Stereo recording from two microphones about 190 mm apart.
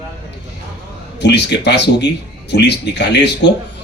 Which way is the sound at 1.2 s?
65° left (ahead or behind).